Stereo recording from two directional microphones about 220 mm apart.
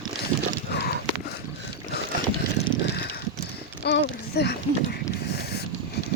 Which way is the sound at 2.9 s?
45° left (ahead or behind).